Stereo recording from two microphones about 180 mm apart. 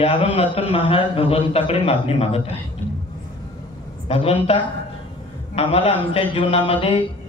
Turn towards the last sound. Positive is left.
turn(degrees=30)  # may be behind; listen again after turning